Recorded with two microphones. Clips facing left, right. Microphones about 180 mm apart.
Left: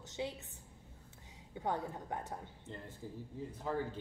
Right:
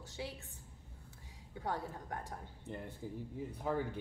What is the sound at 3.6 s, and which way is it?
Speech, 15° right (ahead or behind).